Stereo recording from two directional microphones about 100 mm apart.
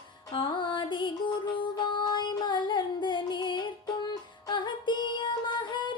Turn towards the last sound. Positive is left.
turn(degrees=50)  # may be behind; listen again after turning